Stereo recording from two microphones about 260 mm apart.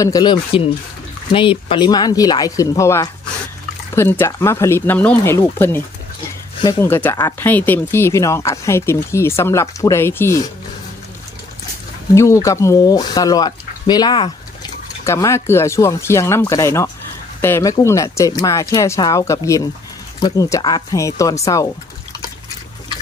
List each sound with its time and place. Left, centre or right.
0.0 s speech: centre
12.1 s speech: centre